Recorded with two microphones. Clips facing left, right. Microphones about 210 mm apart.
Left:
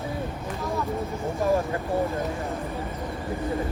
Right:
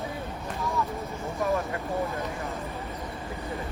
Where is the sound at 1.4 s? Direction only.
30° left (ahead or behind).